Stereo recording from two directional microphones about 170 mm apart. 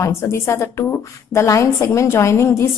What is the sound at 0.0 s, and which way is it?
A woman's voice, 15° left (ahead or behind).